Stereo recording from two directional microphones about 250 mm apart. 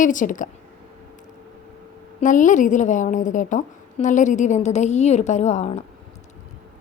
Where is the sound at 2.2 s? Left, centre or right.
Left.